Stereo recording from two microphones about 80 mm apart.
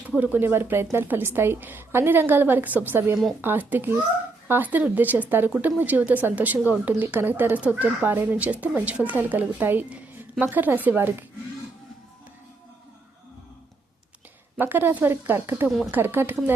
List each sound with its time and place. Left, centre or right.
0.2 s a woman's voice: right
14.6 s a woman's voice: right